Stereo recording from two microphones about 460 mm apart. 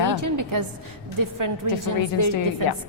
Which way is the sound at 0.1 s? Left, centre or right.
Right.